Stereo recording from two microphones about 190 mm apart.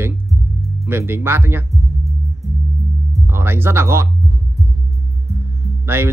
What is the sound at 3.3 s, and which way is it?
Speech, 10° right (ahead or behind).